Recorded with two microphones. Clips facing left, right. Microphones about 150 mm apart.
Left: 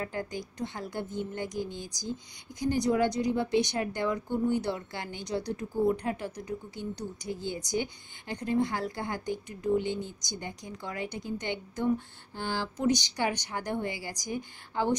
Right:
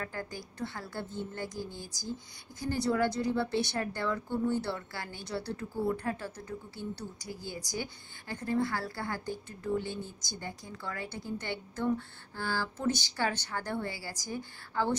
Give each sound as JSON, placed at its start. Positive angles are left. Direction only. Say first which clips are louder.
{"t": 0.0, "sound": "a woman's voice", "louder": "left 4 dB", "side_deg": 20}